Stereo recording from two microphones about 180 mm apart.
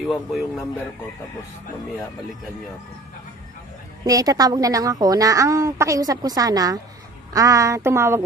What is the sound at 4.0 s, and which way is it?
A woman's voice, 20° right (ahead or behind).